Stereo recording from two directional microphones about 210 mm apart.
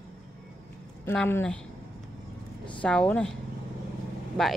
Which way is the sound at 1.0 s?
10° left (ahead or behind).